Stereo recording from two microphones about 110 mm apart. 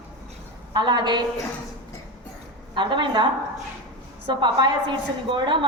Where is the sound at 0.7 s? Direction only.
40° right (ahead or behind).